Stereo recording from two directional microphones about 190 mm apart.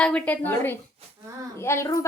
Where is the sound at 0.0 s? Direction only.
5° left (ahead or behind).